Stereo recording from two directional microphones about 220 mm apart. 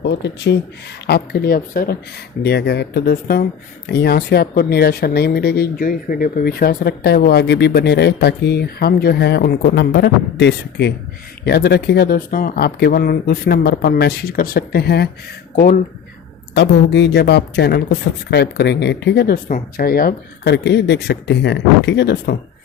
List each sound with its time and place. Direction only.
0.0 s speech: 50° left (ahead or behind)
16.6 s speech: 50° left (ahead or behind)